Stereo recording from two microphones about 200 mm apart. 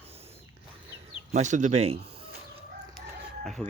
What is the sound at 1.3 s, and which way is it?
Speech, 35° right (ahead or behind).